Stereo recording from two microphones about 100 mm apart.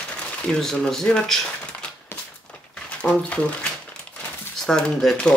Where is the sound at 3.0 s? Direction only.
15° left (ahead or behind).